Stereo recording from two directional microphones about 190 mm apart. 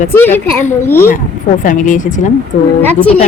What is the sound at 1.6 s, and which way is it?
Speech, 45° left (ahead or behind).